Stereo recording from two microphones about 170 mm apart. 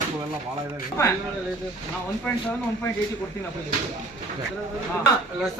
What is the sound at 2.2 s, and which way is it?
Speech, 10° left (ahead or behind).